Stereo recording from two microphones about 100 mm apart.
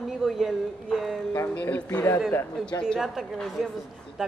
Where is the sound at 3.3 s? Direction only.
5° left (ahead or behind).